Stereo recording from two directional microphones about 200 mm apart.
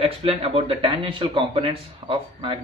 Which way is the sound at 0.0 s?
30° right (ahead or behind).